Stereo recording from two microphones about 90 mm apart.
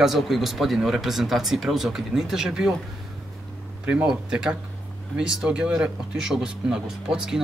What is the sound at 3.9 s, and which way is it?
Speech, 10° right (ahead or behind).